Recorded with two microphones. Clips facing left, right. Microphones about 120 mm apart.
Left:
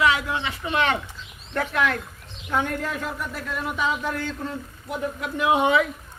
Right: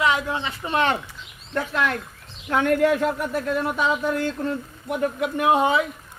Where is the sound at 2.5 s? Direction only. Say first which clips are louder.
Right 7 dB; 70° right (ahead or behind).